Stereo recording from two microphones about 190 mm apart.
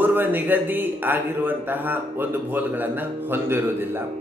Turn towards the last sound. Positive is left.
turn(degrees=-10)  # may be behind; listen again after turning